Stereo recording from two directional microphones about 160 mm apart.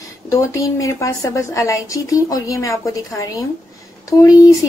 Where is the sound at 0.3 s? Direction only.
20° left (ahead or behind).